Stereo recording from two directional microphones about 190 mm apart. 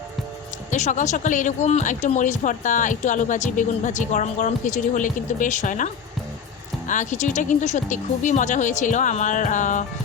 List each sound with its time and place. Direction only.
0.7 s speech: 40° left (ahead or behind)